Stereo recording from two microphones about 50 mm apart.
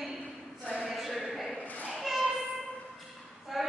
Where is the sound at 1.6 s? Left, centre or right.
Left.